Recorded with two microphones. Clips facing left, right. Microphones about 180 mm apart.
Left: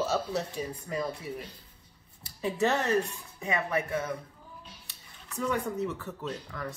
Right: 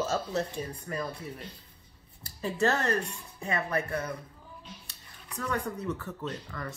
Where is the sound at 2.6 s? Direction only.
5° left (ahead or behind).